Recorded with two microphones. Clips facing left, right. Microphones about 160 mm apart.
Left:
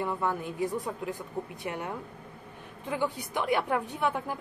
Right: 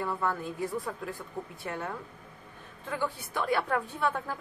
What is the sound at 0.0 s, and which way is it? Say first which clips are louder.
A woman's voice: left 1 dB; 15° left (ahead or behind).